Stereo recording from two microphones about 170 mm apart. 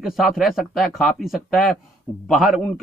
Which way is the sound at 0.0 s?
Centre (ahead or behind).